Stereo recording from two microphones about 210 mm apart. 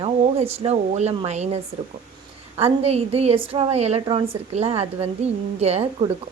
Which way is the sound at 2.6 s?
30° right (ahead or behind).